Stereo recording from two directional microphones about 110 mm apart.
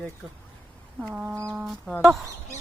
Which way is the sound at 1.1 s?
25° right (ahead or behind).